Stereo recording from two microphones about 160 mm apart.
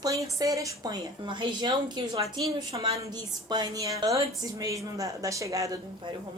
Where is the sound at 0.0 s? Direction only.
20° right (ahead or behind).